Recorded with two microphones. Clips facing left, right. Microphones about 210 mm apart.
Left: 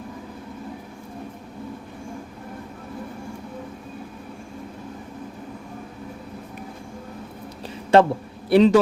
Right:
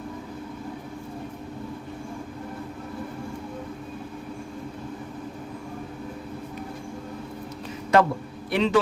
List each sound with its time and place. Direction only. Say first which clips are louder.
7.9 s a man's voice: left 4 dB; 30° left (ahead or behind)